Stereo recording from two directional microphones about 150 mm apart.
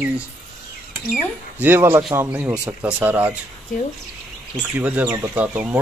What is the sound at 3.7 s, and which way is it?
Speech, 60° left (ahead or behind).